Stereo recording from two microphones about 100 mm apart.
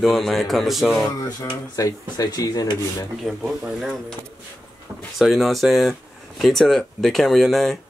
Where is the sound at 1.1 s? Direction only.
40° left (ahead or behind).